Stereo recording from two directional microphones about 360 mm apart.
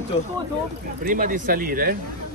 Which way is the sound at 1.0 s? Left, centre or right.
Right.